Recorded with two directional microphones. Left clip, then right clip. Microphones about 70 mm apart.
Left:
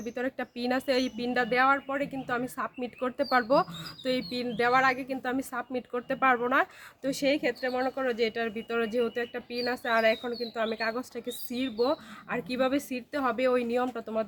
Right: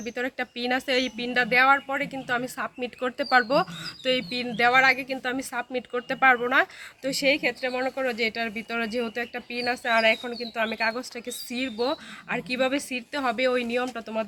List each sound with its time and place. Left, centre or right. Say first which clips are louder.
0.0 s a woman's voice: right 3 dB; left
3.2 s speech: right 3 dB; centre; by 5.5 s left
5.5 s speech: right 4 dB; left
6.5 s speech: right 4 dB; left